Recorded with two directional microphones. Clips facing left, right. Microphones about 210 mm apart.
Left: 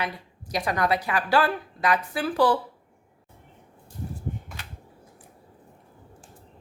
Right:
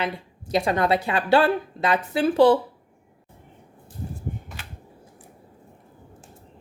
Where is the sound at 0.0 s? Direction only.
25° right (ahead or behind).